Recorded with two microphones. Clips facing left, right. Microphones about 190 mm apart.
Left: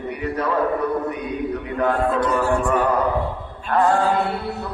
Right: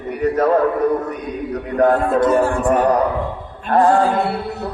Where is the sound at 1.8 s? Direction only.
45° right (ahead or behind).